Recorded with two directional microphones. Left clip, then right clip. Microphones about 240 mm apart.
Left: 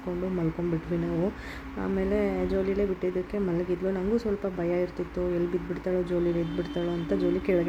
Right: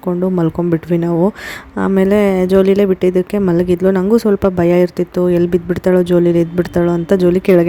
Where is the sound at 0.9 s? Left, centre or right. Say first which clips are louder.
Right 16 dB; right.